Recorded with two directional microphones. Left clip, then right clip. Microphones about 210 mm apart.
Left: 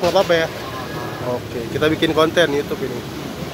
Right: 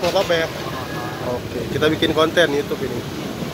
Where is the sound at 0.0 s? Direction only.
25° left (ahead or behind).